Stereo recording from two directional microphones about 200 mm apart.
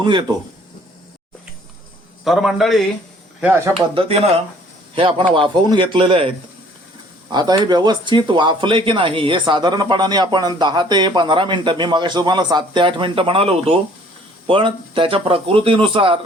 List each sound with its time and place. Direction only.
0.0 s speech: 25° right (ahead or behind)
2.2 s a man's voice: centre (ahead or behind)
4.9 s speech: 25° right (ahead or behind)